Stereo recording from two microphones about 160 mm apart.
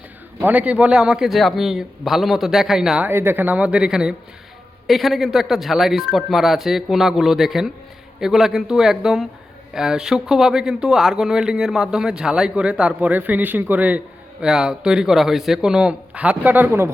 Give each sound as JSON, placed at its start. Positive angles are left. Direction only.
{"t": 0.4, "sound": "speech", "side_deg": -10}